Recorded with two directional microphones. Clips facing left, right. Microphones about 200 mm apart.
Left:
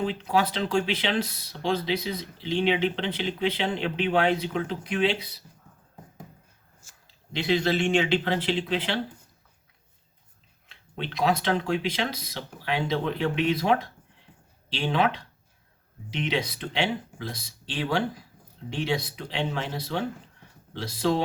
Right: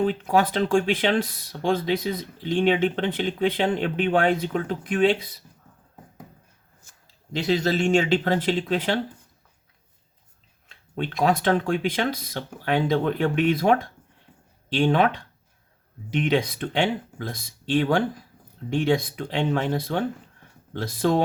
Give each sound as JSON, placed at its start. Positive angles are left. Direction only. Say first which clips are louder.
{"t": 0.0, "sound": "speech", "louder": "right 4 dB", "side_deg": -50}
{"t": 7.3, "sound": "speech", "louder": "right 2 dB", "side_deg": -40}
{"t": 10.7, "sound": "speech", "louder": "right 5 dB", "side_deg": -45}